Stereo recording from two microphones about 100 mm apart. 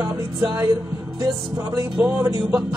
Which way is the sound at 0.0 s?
30° right (ahead or behind).